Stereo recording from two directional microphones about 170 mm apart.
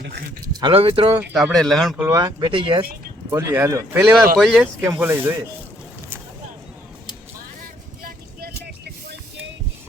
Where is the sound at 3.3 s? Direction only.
15° right (ahead or behind).